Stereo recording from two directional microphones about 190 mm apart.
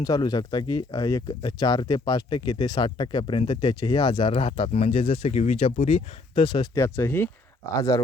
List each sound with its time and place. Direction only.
0.0 s speech: 20° left (ahead or behind)